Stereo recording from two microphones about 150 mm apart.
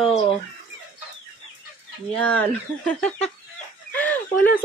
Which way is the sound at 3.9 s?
10° left (ahead or behind).